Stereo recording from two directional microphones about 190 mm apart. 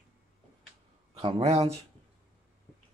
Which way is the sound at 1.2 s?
20° right (ahead or behind).